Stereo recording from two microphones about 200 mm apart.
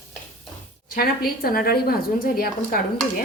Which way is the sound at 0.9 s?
45° left (ahead or behind).